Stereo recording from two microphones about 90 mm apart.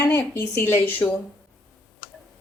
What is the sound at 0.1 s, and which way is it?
Speech, 25° left (ahead or behind).